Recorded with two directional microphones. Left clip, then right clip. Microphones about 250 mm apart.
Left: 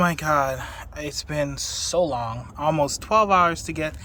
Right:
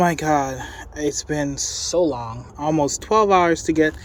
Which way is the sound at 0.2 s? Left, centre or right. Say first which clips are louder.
Right 1 dB; centre.